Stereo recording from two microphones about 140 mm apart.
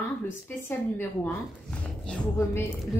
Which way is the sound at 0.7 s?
15° left (ahead or behind).